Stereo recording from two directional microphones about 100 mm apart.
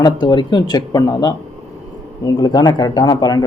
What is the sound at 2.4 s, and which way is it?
Speech, 40° left (ahead or behind).